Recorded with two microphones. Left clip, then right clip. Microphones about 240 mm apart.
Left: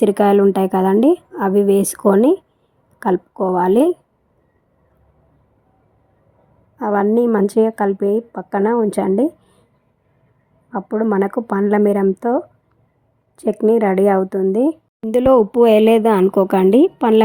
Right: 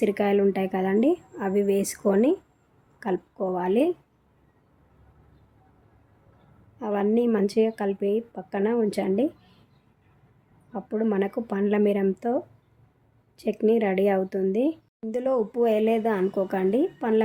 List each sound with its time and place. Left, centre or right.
0.0 s speech: left
6.9 s speech: left
10.7 s speech: left
13.3 s speech: left
15.1 s speech: left